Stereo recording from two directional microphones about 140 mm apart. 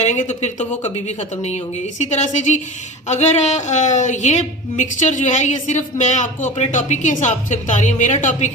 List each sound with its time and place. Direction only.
0.0 s a woman's voice: 55° left (ahead or behind)